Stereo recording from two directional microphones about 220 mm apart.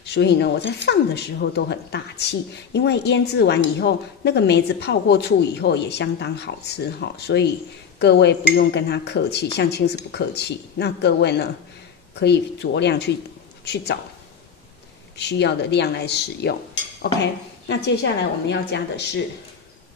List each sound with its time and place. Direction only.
0.0 s speech: 50° left (ahead or behind)
15.1 s speech: 50° left (ahead or behind)